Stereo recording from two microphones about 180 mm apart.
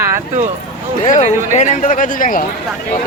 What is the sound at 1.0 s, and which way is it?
Speech, 40° left (ahead or behind).